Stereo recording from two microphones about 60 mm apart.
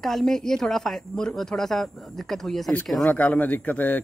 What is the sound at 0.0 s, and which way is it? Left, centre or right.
Speech, centre.